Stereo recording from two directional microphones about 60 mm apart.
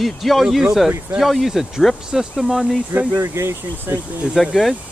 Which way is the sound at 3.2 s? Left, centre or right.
Right.